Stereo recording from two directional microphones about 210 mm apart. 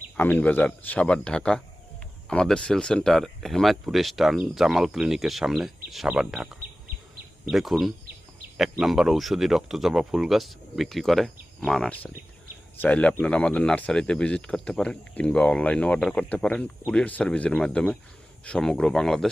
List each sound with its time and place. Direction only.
0.2 s speech: 5° left (ahead or behind)